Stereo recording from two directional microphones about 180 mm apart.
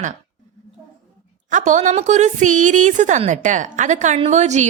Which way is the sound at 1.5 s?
45° right (ahead or behind).